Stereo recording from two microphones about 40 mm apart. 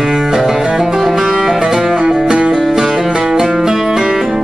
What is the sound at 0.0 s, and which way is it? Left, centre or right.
Music, centre.